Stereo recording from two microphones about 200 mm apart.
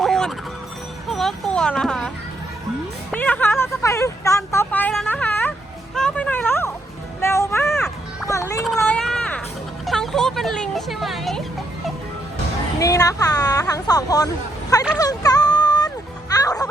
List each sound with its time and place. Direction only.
0.0 s fowl: centre (ahead or behind)
1.1 s a sound: centre (ahead or behind)
3.1 s vehicle: 10° left (ahead or behind)
7.2 s music: 15° left (ahead or behind)
7.7 s music: centre (ahead or behind)
8.3 s children playing: 15° left (ahead or behind)
8.6 s a sound: centre (ahead or behind)
12.8 s speech: 15° left (ahead or behind)
14.9 s a sound: 20° left (ahead or behind)
16.3 s music: 20° left (ahead or behind)